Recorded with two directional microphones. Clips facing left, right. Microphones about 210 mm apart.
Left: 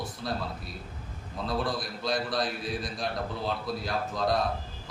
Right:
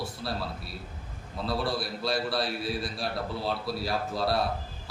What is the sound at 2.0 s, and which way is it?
A man's voice, 5° right (ahead or behind).